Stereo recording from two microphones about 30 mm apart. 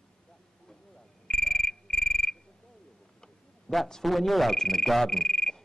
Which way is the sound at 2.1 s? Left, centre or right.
Centre.